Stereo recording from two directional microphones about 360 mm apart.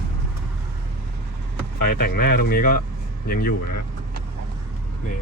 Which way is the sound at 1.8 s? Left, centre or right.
Left.